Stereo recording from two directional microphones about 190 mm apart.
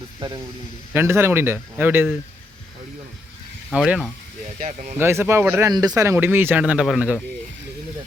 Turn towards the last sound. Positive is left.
turn(degrees=-5)  # may be behind; listen again after turning